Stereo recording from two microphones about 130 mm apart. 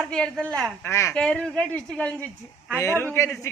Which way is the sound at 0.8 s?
20° left (ahead or behind).